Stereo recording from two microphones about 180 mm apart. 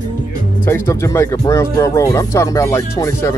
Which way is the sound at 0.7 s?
15° left (ahead or behind).